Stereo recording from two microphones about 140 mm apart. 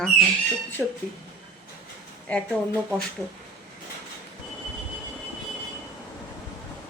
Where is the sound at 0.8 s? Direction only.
5° right (ahead or behind).